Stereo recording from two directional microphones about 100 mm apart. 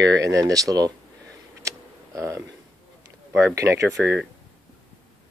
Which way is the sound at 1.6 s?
30° right (ahead or behind).